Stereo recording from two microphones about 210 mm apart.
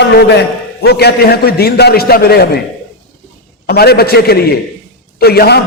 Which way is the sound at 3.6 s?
50° left (ahead or behind).